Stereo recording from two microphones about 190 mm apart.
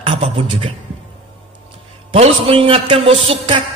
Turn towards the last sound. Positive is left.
turn(degrees=-30)  # may be behind; listen again after turning